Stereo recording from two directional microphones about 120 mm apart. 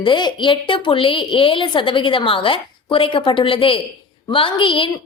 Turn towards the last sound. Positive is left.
turn(degrees=45)  # may be behind; listen again after turning